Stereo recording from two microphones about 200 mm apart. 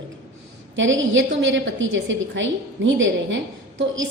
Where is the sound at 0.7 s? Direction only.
70° right (ahead or behind).